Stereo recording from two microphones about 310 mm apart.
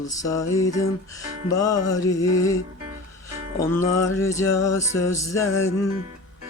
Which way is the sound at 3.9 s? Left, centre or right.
Left.